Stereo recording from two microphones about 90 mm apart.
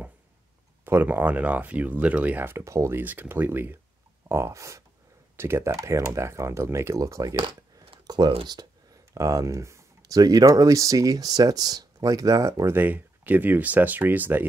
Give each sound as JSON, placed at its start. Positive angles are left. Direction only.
{"t": 0.8, "sound": "speech", "side_deg": -25}
{"t": 3.0, "sound": "speech", "side_deg": -20}
{"t": 7.3, "sound": "a sound", "side_deg": -90}
{"t": 9.1, "sound": "speech", "side_deg": -35}
{"t": 12.7, "sound": "speech", "side_deg": -20}